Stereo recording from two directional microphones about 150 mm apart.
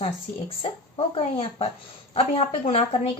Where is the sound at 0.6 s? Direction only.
40° left (ahead or behind).